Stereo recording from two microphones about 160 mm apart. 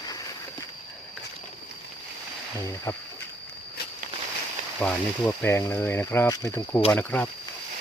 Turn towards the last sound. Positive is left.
turn(degrees=10)  # may be behind; listen again after turning